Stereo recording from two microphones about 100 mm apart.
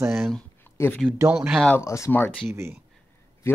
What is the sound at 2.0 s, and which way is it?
Speech, 20° left (ahead or behind).